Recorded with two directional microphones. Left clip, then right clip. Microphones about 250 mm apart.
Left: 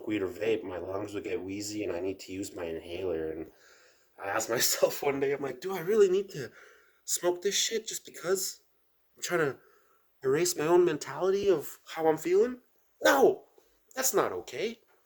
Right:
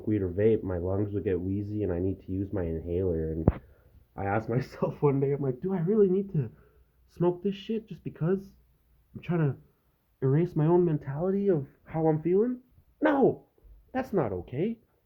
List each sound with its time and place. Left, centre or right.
0.1 s speech: centre
4.4 s speech: centre